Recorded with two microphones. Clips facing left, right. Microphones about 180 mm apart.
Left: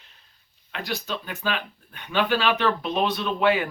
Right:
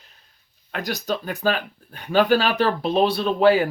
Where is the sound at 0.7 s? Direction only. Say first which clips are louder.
Right 5 dB; 40° right (ahead or behind).